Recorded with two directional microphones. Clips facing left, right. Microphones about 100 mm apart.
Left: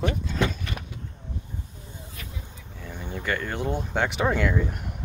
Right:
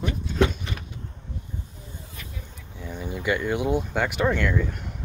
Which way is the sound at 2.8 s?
15° right (ahead or behind).